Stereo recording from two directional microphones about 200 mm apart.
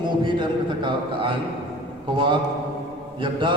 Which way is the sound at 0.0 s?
25° right (ahead or behind).